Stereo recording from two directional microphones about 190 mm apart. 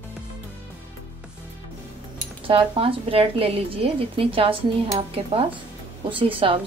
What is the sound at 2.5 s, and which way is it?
A woman's voice, 30° right (ahead or behind).